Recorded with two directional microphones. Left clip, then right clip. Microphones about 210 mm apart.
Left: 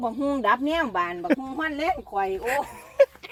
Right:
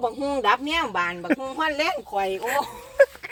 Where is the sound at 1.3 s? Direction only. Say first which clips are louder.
Left 1 dB; 10° left (ahead or behind).